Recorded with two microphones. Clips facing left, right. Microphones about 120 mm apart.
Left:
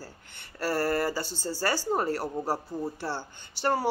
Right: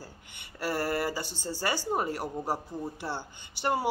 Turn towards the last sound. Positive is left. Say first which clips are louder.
# left 2 dB
turn(degrees=-15)  # may be behind; listen again after turning